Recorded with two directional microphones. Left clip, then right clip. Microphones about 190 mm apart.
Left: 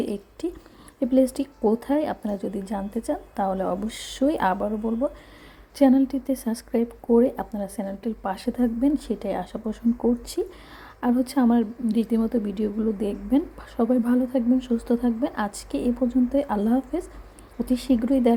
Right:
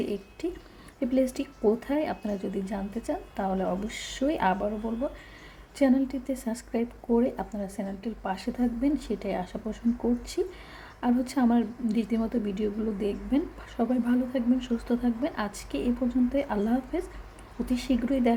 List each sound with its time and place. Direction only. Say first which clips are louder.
0.0 s a woman's voice: left 3 dB; 35° left (ahead or behind)
5.7 s a woman's voice: left 5 dB; 30° left (ahead or behind)